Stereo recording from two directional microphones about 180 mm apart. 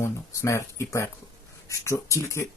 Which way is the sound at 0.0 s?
15° left (ahead or behind).